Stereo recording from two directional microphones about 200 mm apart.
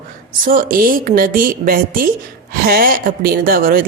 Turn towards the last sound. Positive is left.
turn(degrees=-45)  # may be behind; listen again after turning